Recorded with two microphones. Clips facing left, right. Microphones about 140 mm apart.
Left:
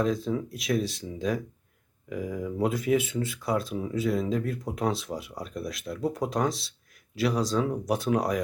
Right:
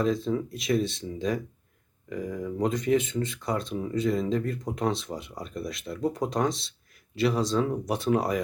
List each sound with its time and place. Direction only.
0.0 s speech: centre (ahead or behind)